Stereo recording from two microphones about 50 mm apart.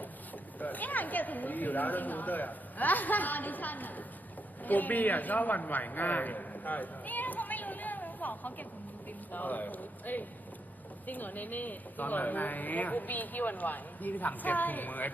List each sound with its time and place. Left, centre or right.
0.6 s a man's voice: left